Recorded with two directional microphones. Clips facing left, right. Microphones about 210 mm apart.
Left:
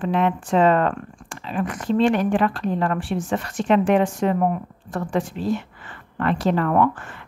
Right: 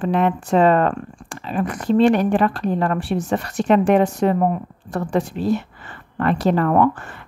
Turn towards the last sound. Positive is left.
turn(degrees=-40)  # may be behind; listen again after turning